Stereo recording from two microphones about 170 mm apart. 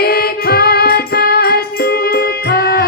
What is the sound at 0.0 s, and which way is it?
Music, 65° left (ahead or behind).